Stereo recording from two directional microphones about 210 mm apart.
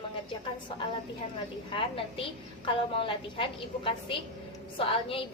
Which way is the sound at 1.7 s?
25° left (ahead or behind).